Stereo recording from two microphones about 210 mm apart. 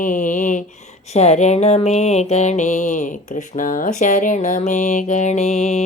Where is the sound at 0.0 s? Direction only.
40° left (ahead or behind).